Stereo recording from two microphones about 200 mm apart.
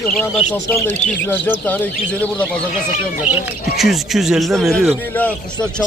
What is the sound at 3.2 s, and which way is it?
Speech, 5° right (ahead or behind).